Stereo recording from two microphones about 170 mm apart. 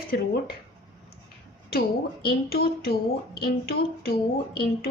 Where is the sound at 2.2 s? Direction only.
65° left (ahead or behind).